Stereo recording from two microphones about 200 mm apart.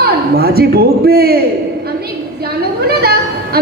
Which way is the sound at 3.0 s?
50° right (ahead or behind).